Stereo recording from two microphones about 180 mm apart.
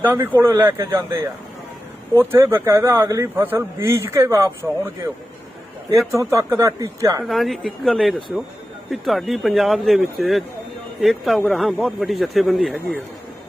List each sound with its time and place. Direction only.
0.0 s a man's voice: 10° right (ahead or behind)
6.1 s a man's voice: 15° right (ahead or behind)
7.3 s speech: centre (ahead or behind)